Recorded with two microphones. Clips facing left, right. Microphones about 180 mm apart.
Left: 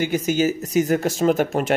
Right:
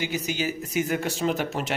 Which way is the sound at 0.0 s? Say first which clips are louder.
Left 8 dB; 50° left (ahead or behind).